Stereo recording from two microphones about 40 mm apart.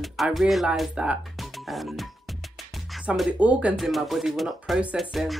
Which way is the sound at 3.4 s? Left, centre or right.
Right.